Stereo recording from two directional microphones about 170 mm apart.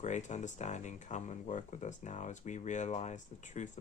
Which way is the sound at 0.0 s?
45° left (ahead or behind).